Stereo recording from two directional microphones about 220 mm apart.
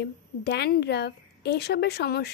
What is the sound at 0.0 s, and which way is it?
A child's voice, 50° left (ahead or behind).